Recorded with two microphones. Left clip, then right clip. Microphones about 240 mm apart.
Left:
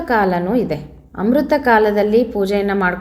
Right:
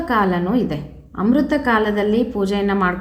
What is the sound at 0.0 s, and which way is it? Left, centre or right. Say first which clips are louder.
A woman's voice: left 2 dB; centre.